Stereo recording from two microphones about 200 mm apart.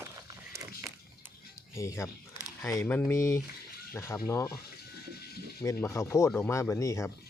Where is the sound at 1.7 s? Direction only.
15° left (ahead or behind).